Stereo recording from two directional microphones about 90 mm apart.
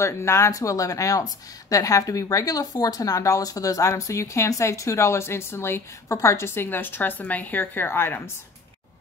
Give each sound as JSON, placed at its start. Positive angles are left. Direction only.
{"t": 0.0, "sound": "speech", "side_deg": 30}